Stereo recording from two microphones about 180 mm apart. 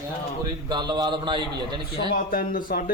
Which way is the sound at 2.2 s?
50° left (ahead or behind).